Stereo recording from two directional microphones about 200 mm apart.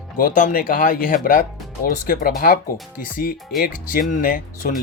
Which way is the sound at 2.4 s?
45° left (ahead or behind).